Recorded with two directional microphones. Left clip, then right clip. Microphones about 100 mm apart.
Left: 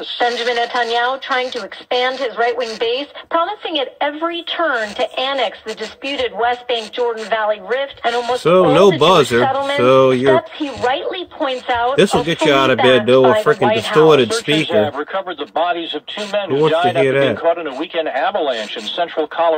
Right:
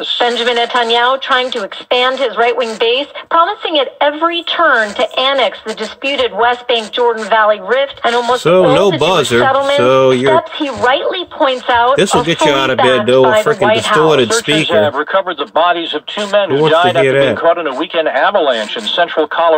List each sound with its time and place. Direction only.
0.2 s speech: 25° right (ahead or behind)
8.5 s speech: 10° right (ahead or behind)
10.8 s speech: 30° right (ahead or behind)
11.9 s speech: 10° right (ahead or behind); by 19.5 s 30° right (ahead or behind)